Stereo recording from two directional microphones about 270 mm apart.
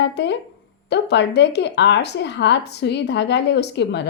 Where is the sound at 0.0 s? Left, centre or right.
Left.